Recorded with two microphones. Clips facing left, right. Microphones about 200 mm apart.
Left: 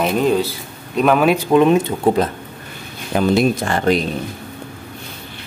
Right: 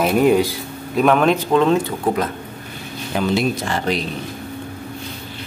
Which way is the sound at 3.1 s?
50° left (ahead or behind).